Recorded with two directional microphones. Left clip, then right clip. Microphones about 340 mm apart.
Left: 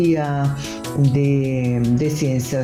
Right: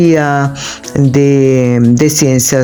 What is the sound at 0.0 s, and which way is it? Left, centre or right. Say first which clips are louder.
Speech: right 10 dB; right.